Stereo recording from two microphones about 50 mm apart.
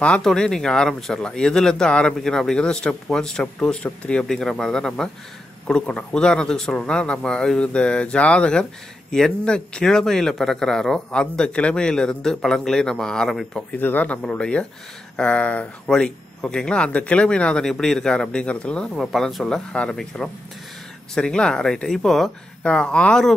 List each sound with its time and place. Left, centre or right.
0.2 s speech: centre
2.1 s speech: centre
3.8 s speech: left
4.3 s speech: centre
13.7 s speech: left
14.4 s speech: centre
15.9 s speech: centre
17.6 s speech: centre; by 18.9 s left
18.9 s speech: centre
22.6 s speech: centre